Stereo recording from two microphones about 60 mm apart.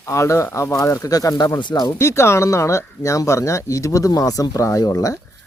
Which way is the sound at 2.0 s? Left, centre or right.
Left.